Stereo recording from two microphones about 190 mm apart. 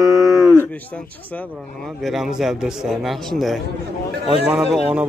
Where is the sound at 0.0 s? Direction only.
15° right (ahead or behind).